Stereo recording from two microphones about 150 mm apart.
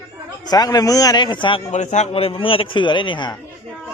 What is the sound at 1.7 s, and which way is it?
Speech, 50° left (ahead or behind).